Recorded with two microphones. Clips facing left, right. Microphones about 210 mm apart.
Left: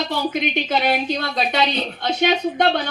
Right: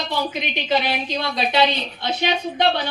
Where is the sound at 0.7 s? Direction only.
50° left (ahead or behind).